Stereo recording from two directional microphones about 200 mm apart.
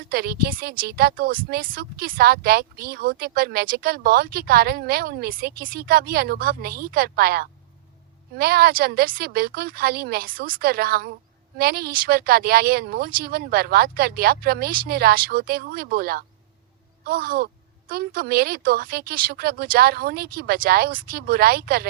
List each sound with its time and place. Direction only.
0.1 s speech: 50° right (ahead or behind)